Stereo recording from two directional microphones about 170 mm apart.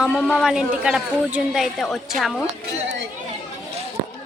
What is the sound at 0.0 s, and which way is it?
Speech, 5° left (ahead or behind).